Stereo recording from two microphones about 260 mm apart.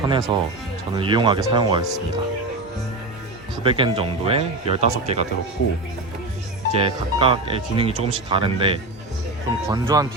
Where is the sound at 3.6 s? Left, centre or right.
Centre.